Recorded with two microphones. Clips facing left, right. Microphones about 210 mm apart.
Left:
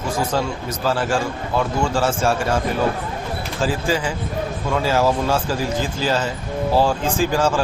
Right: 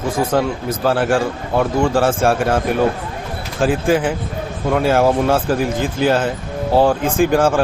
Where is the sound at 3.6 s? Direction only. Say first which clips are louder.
Right 6 dB; 55° right (ahead or behind).